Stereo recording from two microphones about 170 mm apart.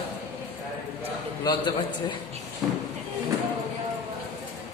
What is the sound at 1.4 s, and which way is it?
Speech, 25° left (ahead or behind).